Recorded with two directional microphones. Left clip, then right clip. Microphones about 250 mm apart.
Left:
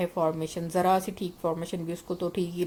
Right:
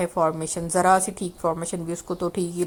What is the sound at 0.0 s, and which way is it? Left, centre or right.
A woman's voice, centre.